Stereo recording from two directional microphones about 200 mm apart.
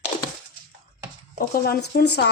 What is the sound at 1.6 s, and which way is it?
Speech, 55° left (ahead or behind).